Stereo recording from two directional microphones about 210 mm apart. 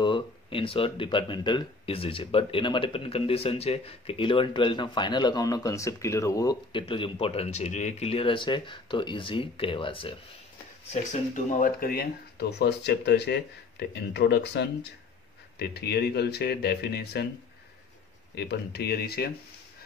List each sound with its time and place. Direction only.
0.0 s speech: 25° left (ahead or behind)
10.9 s speech: 35° left (ahead or behind)
18.3 s speech: 50° left (ahead or behind)